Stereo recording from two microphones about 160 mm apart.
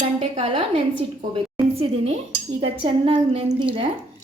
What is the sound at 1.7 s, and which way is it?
A woman's voice, 40° right (ahead or behind).